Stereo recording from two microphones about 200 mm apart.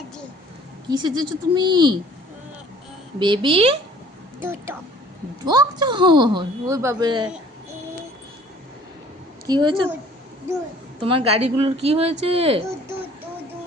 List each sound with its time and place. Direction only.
0.9 s a woman's voice: 20° right (ahead or behind)
3.2 s a woman's voice: 25° right (ahead or behind)
4.4 s a woman's voice: 10° right (ahead or behind)
9.5 s a woman's voice: 20° right (ahead or behind)
11.0 s a woman's voice: 30° right (ahead or behind)